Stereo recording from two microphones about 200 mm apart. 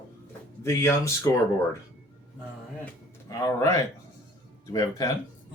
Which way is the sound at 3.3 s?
15° left (ahead or behind).